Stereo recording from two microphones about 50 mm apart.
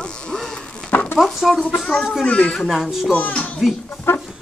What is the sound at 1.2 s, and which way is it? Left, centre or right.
Speech, centre.